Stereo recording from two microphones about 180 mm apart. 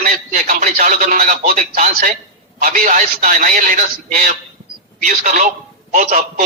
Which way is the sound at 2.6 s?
50° right (ahead or behind).